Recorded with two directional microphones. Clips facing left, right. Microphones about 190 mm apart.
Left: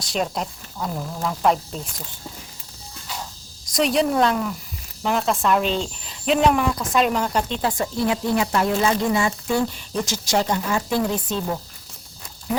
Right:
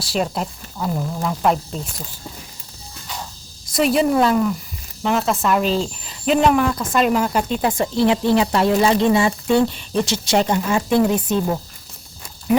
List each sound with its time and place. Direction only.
0.0 s speech: 5° right (ahead or behind)
3.7 s speech: 5° right (ahead or behind)
8.0 s speech: 25° right (ahead or behind)